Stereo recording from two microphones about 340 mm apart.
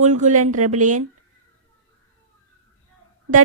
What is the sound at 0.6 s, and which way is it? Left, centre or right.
Speech, right.